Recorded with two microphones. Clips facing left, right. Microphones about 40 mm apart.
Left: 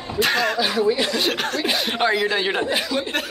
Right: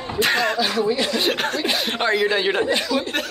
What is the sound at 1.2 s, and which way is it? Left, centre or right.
Speech, centre.